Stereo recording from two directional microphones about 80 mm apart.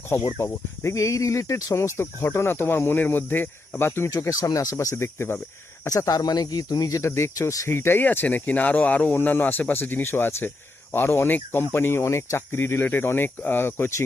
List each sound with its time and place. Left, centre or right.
0.3 s speech: left
4.3 s speech: left
5.8 s speech: left
7.7 s speech: left